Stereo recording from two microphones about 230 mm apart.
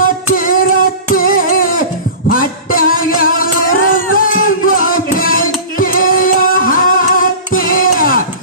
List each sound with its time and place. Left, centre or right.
0.0 s female singing: left
1.1 s music: left